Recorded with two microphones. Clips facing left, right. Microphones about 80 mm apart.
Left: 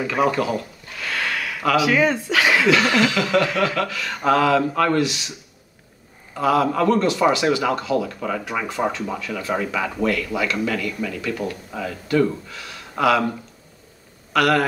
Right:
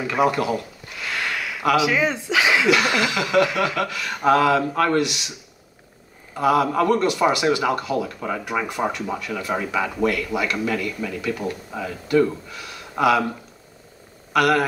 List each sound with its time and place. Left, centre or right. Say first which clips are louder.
0.0 s speech: even; centre
6.3 s speech: even; centre
14.3 s speech: even; centre